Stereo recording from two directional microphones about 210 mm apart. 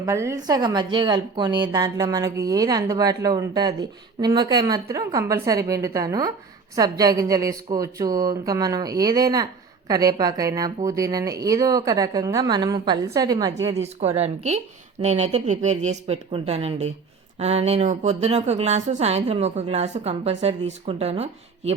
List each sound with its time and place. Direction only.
0.0 s a woman's voice: 15° right (ahead or behind)
14.2 s speech: 30° right (ahead or behind)